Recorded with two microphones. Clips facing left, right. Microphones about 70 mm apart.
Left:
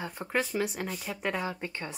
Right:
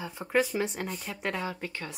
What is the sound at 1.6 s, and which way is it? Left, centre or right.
Speech, left.